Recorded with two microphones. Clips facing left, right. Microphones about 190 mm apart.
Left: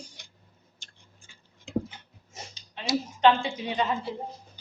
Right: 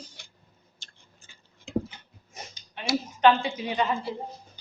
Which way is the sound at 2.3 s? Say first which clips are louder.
Right 1 dB; 25° left (ahead or behind).